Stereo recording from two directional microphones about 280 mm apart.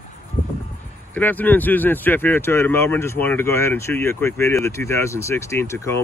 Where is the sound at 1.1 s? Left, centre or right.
Centre.